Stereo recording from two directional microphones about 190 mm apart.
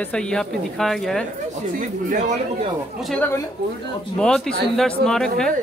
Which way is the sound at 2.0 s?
40° right (ahead or behind).